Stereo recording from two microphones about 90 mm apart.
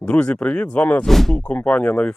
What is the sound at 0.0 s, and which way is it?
Speech, 10° left (ahead or behind).